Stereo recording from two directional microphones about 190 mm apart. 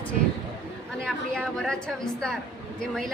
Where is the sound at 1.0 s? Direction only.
5° left (ahead or behind).